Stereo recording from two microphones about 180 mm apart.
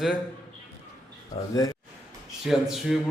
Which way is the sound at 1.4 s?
35° left (ahead or behind).